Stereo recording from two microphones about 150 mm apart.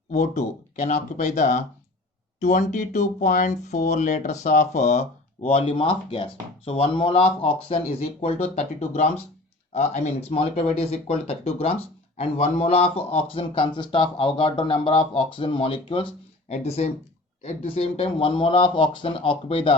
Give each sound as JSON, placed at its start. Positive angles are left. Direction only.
{"t": 0.1, "sound": "speech", "side_deg": 50}